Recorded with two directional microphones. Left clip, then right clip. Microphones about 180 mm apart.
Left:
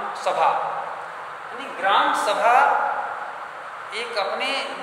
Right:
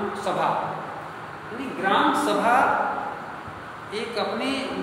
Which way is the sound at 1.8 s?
10° left (ahead or behind).